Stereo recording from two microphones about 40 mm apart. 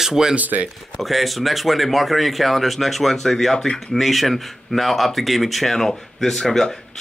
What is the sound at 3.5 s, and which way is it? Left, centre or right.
Speech, centre.